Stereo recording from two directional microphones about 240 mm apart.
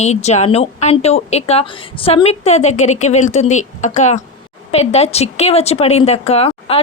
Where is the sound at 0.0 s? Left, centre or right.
Left.